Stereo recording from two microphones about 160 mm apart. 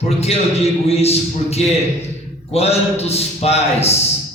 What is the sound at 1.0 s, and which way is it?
A man's voice, 40° left (ahead or behind).